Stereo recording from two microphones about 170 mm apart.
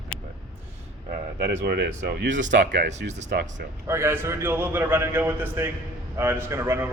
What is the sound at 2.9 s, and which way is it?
Speech, 90° right.